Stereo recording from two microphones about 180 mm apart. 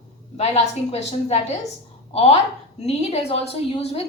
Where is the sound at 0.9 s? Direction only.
35° left (ahead or behind).